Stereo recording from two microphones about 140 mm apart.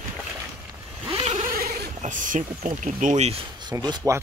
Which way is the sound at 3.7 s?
30° right (ahead or behind).